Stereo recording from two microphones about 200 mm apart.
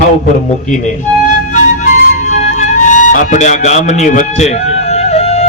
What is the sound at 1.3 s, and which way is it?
Music, 40° left (ahead or behind).